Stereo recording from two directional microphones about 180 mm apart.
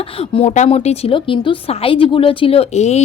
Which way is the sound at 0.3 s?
40° left (ahead or behind).